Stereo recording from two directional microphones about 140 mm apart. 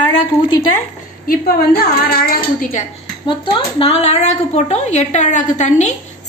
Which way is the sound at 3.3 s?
40° left (ahead or behind).